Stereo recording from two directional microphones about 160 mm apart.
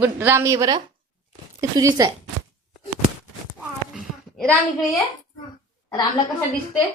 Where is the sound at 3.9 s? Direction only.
5° left (ahead or behind).